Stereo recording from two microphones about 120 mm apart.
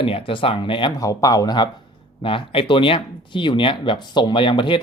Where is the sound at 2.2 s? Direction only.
45° left (ahead or behind).